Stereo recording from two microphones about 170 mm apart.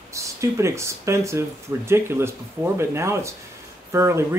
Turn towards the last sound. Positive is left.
turn(degrees=-15)  # may be behind; listen again after turning